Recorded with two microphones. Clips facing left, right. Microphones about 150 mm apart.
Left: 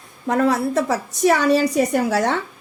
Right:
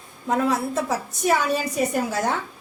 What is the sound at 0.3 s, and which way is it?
A woman's voice, 70° left (ahead or behind).